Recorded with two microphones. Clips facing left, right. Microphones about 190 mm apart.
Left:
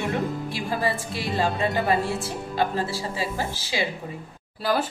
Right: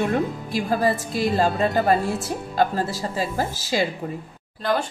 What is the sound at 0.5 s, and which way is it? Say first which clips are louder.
Speech: right 7 dB; 45° right (ahead or behind).